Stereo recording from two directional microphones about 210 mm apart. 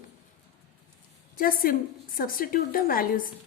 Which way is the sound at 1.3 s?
45° left (ahead or behind).